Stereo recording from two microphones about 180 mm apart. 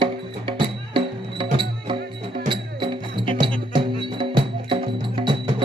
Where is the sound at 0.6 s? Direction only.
25° right (ahead or behind).